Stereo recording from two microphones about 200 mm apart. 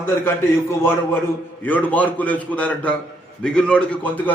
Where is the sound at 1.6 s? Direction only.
10° left (ahead or behind).